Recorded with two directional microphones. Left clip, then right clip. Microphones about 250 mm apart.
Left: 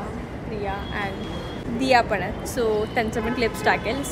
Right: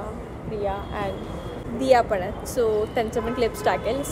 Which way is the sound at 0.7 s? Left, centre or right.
Centre.